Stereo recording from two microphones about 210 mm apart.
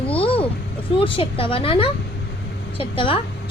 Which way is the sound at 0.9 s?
25° left (ahead or behind).